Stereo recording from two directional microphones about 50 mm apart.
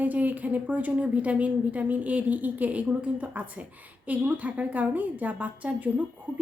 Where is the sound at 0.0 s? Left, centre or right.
Right.